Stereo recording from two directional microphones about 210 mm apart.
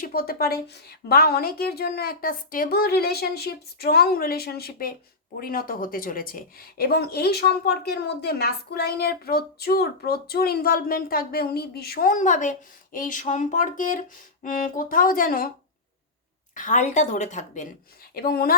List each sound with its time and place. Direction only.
0.0 s a woman's voice: 45° left (ahead or behind)
16.6 s a woman's voice: 35° left (ahead or behind)
18.1 s speech: 45° left (ahead or behind)